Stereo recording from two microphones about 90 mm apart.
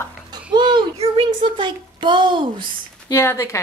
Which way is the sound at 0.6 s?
60° right (ahead or behind).